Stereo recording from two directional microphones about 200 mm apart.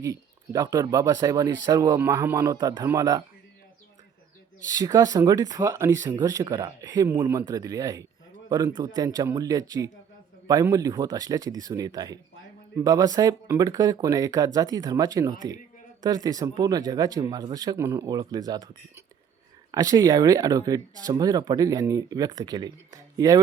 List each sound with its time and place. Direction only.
0.0 s speech: 15° right (ahead or behind)
4.7 s speech: 15° right (ahead or behind)